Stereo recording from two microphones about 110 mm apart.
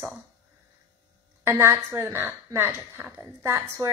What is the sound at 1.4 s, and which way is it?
Speech, 25° right (ahead or behind).